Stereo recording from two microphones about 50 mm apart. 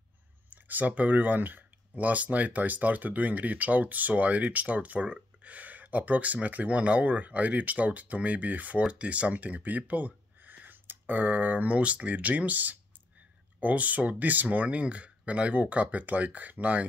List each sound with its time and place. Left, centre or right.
0.5 s speech: right